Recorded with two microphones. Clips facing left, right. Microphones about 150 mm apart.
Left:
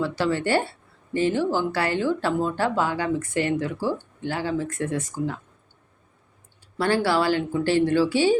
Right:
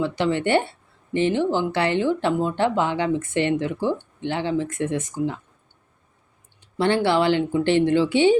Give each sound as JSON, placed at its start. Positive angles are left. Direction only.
{"t": 0.0, "sound": "speech", "side_deg": -20}
{"t": 6.6, "sound": "speech", "side_deg": -20}